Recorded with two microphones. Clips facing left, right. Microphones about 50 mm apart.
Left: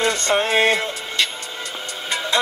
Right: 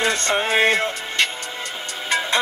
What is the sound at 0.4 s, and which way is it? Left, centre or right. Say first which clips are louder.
Speech: even; centre.